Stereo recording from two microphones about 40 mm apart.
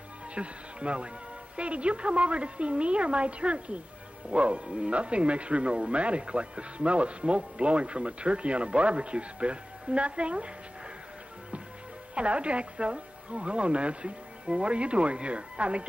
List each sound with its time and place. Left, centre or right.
0.3 s speech: right
12.2 s speech: right